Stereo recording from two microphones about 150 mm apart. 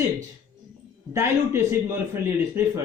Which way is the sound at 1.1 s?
15° right (ahead or behind).